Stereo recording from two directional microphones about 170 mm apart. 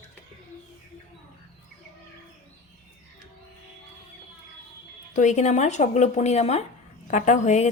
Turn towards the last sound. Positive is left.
turn(degrees=45)  # may be behind; listen again after turning